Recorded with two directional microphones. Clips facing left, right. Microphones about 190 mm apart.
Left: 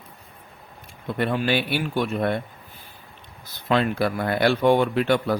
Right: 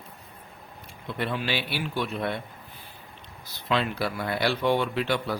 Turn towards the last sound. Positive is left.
turn(degrees=50)  # may be behind; listen again after turning